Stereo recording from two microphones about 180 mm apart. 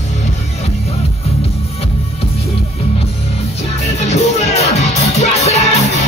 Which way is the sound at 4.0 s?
40° left (ahead or behind).